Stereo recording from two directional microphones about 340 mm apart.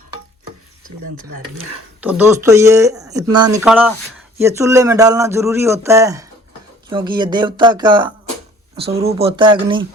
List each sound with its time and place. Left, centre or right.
2.0 s speech: centre